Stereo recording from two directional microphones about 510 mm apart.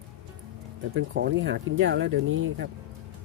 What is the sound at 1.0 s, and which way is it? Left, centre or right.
Speech, right.